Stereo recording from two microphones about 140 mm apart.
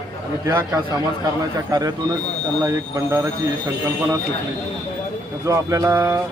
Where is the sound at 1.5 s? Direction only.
25° right (ahead or behind).